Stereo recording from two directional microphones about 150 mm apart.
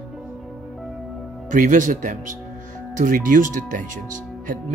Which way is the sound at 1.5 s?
60° right (ahead or behind).